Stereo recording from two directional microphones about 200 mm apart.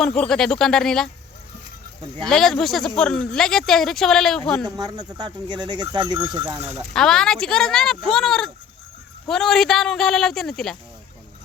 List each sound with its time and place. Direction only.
0.0 s speech: 5° left (ahead or behind)
2.2 s speech: centre (ahead or behind)
4.6 s speech: 20° right (ahead or behind)
6.9 s speech: 5° left (ahead or behind)